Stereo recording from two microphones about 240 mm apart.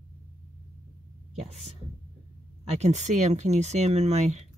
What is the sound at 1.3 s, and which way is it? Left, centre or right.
Speech, right.